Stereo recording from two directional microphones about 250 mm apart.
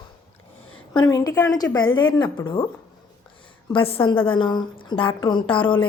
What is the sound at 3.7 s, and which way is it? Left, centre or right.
Speech, left.